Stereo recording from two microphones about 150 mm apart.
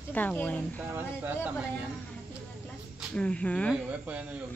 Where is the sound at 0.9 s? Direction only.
10° right (ahead or behind).